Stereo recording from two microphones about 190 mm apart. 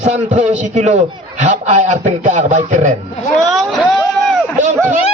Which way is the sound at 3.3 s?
Centre (ahead or behind).